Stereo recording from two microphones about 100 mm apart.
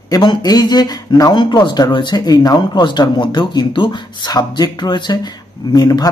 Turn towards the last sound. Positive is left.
turn(degrees=40)  # may be behind; listen again after turning